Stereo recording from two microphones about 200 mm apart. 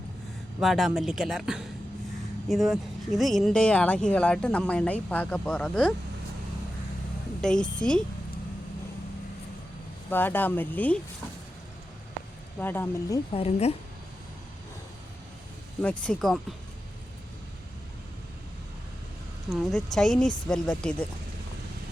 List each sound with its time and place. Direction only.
0.6 s speech: centre (ahead or behind)
7.4 s speech: 5° left (ahead or behind)
10.1 s speech: 10° left (ahead or behind)
12.5 s speech: 10° left (ahead or behind)
13.3 s a woman's voice: 30° left (ahead or behind)
15.8 s speech: 5° left (ahead or behind)
19.5 s speech: centre (ahead or behind)